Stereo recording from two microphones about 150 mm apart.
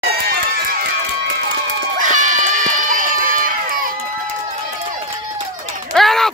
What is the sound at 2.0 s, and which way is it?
Run, 60° right (ahead or behind).